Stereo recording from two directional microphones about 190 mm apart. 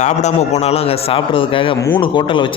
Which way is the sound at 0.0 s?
35° left (ahead or behind).